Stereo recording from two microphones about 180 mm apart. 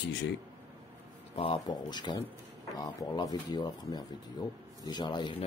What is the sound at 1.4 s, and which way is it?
Speech, 25° left (ahead or behind).